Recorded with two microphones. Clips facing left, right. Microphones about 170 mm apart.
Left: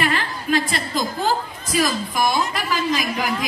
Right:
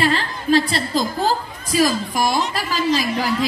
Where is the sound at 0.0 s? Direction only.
25° right (ahead or behind).